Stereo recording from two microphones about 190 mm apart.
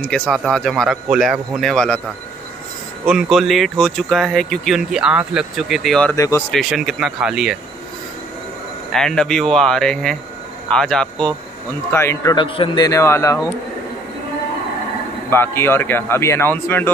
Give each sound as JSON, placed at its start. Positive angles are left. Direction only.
{"t": 0.1, "sound": "speech", "side_deg": 0}
{"t": 3.1, "sound": "speech", "side_deg": 0}
{"t": 6.1, "sound": "speech", "side_deg": 15}
{"t": 6.5, "sound": "speech", "side_deg": 0}
{"t": 8.9, "sound": "speech", "side_deg": 5}
{"t": 11.9, "sound": "speech", "side_deg": 15}
{"t": 15.2, "sound": "speech", "side_deg": 10}